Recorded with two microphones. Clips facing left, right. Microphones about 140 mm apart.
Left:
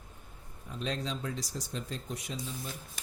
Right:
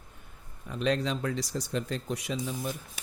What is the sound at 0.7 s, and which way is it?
Speech, 70° right (ahead or behind).